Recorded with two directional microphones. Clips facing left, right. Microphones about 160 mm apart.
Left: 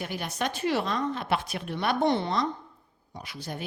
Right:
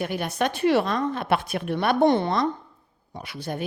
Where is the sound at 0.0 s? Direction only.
55° right (ahead or behind).